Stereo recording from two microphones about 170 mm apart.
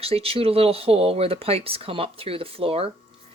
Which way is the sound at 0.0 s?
35° right (ahead or behind).